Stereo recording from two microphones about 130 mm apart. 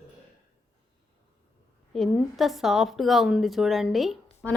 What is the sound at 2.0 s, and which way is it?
A woman's voice, centre (ahead or behind).